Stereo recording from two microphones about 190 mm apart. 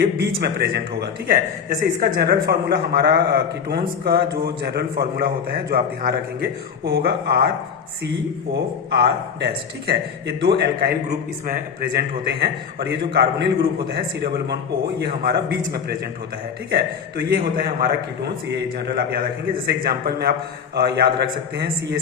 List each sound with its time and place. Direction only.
0.0 s a man's voice: 60° right (ahead or behind)
9.0 s a man's voice: 55° right (ahead or behind)